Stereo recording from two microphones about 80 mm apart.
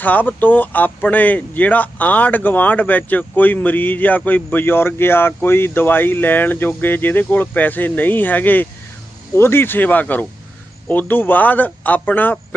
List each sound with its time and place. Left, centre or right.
0.0 s speech: left